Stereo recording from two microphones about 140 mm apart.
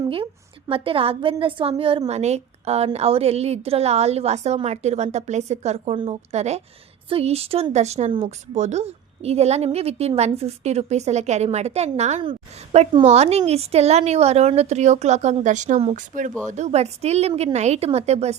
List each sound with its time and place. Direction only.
0.7 s a woman's voice: 40° right (ahead or behind)
16.0 s a woman's voice: 65° right (ahead or behind)